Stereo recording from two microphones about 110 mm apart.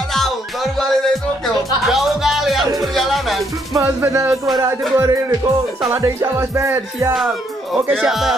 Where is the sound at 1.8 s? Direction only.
Centre (ahead or behind).